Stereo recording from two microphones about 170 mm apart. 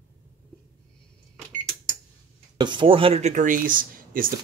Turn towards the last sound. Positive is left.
turn(degrees=-55)  # may be behind; listen again after turning